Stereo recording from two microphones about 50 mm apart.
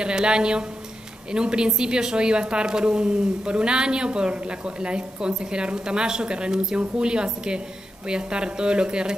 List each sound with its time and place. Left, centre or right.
0.0 s a woman's voice: centre